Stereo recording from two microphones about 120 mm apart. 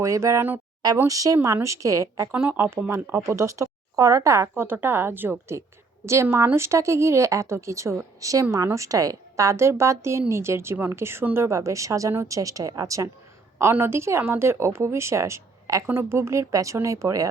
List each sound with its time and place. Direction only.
0.0 s speech: 25° right (ahead or behind)
2.3 s speech: 15° right (ahead or behind)